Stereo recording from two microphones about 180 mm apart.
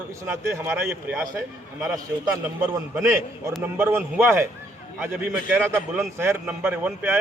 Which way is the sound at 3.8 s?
15° right (ahead or behind).